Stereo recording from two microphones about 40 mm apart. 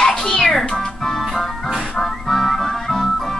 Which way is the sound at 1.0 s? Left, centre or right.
Centre.